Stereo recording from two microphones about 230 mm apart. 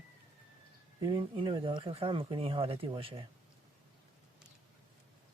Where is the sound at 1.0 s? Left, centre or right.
Centre.